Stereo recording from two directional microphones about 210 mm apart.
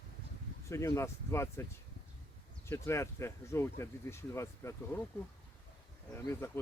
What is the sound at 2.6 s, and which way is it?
Speech, 15° left (ahead or behind).